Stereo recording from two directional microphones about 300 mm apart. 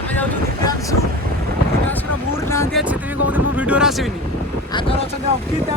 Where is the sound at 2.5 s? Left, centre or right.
Centre.